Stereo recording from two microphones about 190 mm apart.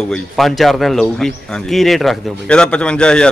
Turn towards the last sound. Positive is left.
turn(degrees=5)  # may be behind; listen again after turning